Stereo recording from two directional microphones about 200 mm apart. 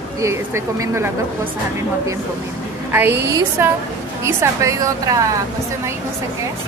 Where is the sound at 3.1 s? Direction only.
60° right (ahead or behind).